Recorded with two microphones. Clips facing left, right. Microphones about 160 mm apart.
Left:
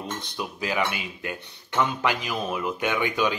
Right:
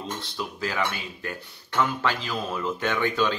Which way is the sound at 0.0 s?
20° left (ahead or behind).